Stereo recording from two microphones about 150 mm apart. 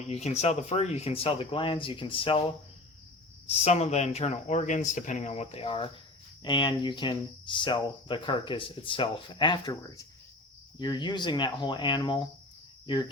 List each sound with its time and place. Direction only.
0.0 s speech: 45° left (ahead or behind)
3.5 s speech: 45° left (ahead or behind)